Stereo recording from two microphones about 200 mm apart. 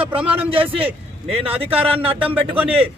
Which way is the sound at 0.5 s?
25° right (ahead or behind).